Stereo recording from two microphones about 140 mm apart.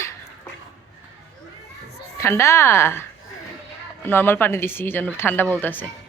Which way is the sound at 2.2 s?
20° left (ahead or behind).